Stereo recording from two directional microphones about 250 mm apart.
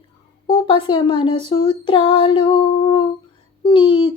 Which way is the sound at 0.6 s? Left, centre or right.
Left.